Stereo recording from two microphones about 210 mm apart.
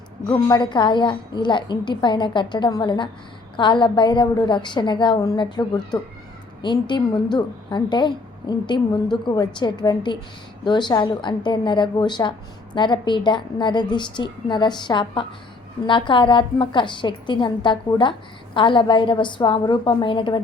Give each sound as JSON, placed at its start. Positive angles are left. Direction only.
{"t": 0.3, "sound": "a woman's voice", "side_deg": 20}